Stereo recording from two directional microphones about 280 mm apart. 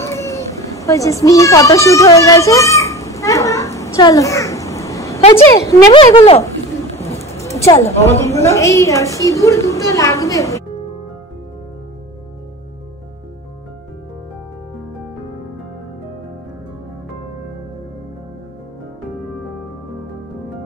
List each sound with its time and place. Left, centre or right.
0.0 s children playing: centre
5.3 s a woman's voice: centre
7.3 s a sound: centre
8.4 s a woman's voice: centre